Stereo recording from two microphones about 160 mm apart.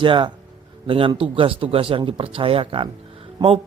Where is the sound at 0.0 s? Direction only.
30° right (ahead or behind).